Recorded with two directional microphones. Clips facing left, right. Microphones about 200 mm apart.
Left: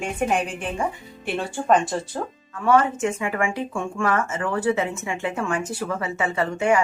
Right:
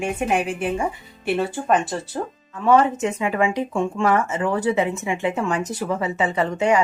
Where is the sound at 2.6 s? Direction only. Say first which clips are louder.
Right 2 dB; 20° right (ahead or behind).